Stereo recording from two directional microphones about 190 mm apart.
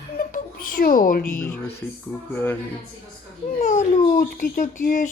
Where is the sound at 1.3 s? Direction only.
10° left (ahead or behind).